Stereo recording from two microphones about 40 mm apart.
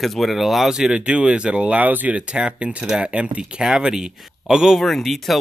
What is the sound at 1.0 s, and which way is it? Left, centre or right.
Speech, right.